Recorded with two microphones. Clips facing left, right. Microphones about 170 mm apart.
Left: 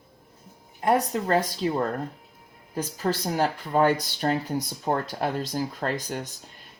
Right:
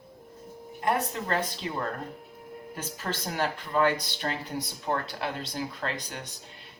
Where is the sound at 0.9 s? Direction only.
40° left (ahead or behind).